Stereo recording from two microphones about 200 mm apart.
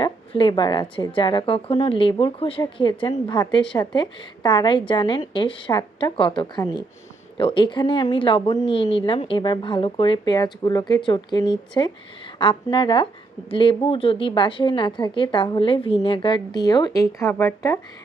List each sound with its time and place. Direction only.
0.0 s a woman's voice: 25° left (ahead or behind)